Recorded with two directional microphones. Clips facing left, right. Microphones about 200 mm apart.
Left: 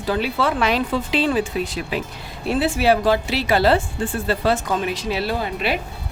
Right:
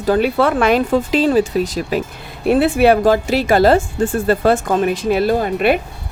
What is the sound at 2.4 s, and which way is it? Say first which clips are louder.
Speech: right 7 dB; 55° right (ahead or behind).